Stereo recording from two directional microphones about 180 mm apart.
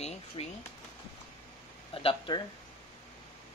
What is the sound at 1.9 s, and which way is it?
Speech, 30° left (ahead or behind).